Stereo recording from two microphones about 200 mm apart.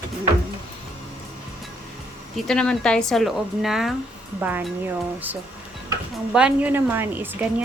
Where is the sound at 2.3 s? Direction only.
5° left (ahead or behind).